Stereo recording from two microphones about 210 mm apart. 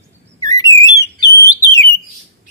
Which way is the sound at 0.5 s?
15° left (ahead or behind).